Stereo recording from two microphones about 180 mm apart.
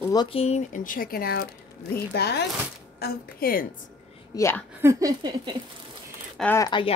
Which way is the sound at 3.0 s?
55° left (ahead or behind).